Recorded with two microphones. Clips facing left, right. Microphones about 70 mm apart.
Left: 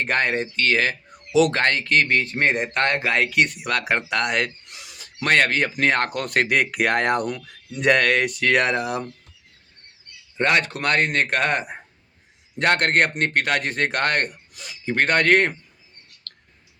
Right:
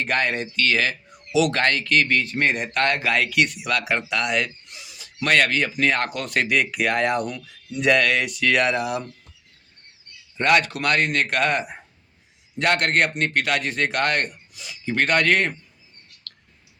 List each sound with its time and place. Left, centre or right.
0.0 s speech: left
5.2 s speech: left
10.3 s speech: left
16.3 s a sound: left